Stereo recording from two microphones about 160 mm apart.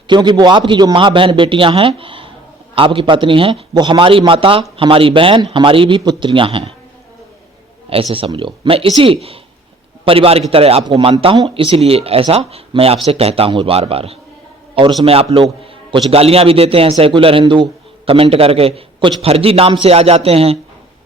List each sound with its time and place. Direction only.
0.1 s a man's voice: 25° right (ahead or behind)
8.1 s a man's voice: 35° right (ahead or behind)